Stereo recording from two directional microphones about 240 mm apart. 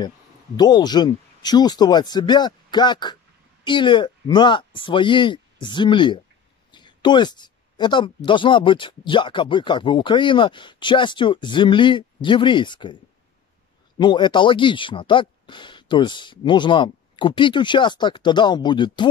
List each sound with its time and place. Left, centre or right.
0.6 s speech: centre
6.7 s a sound: centre
8.3 s speech: centre
13.9 s speech: centre